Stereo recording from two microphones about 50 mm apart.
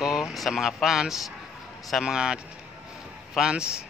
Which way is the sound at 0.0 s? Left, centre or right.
Centre.